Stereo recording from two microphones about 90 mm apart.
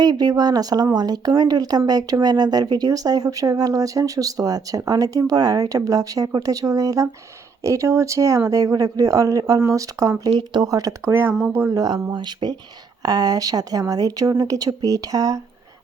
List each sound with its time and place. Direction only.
0.0 s speech: 50° right (ahead or behind)
10.3 s speech: 50° right (ahead or behind)
11.1 s speech: 25° right (ahead or behind)
11.7 s speech: 40° right (ahead or behind)
12.1 s speech: 55° right (ahead or behind)
13.0 s speech: 45° right (ahead or behind)